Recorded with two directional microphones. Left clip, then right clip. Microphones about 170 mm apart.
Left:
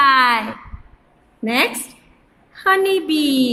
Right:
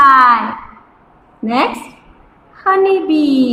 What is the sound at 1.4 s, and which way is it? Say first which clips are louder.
A woman's voice: right 3 dB; 45° left (ahead or behind).